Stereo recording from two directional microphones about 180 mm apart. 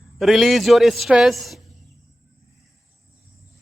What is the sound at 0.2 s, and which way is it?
A man's voice, centre (ahead or behind).